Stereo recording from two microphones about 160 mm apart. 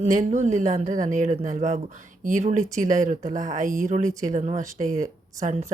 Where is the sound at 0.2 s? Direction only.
50° right (ahead or behind).